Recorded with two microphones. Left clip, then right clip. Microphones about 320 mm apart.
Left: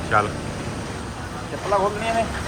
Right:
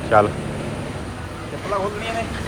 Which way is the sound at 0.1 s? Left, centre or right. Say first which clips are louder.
Right 5 dB; centre.